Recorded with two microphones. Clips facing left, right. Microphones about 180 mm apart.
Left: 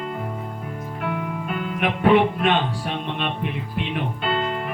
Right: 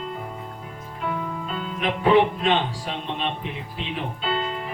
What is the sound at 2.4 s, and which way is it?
Speech, 60° left (ahead or behind).